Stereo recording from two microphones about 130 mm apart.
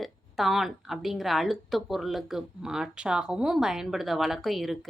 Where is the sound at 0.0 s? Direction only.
Centre (ahead or behind).